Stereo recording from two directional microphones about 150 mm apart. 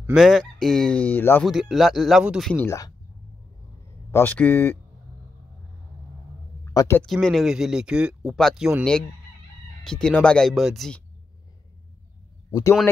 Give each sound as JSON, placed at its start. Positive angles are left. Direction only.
{"t": 0.1, "sound": "speech", "side_deg": 0}
{"t": 1.4, "sound": "speech", "side_deg": 0}
{"t": 2.5, "sound": "speech", "side_deg": 10}
{"t": 4.1, "sound": "speech", "side_deg": 15}
{"t": 6.6, "sound": "a sound", "side_deg": 20}
{"t": 7.0, "sound": "speech", "side_deg": 5}
{"t": 12.4, "sound": "a man's voice", "side_deg": 25}